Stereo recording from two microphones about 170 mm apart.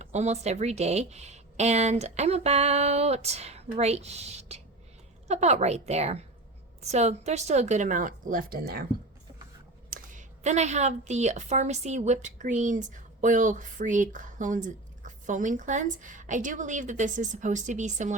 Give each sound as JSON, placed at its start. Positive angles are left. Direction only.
{"t": 0.0, "sound": "a woman's voice", "side_deg": -40}
{"t": 9.9, "sound": "a woman's voice", "side_deg": -50}